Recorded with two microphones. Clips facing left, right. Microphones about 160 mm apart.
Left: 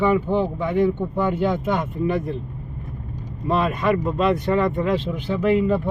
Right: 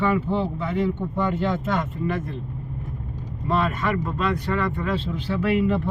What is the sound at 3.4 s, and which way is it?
Speech, 15° left (ahead or behind).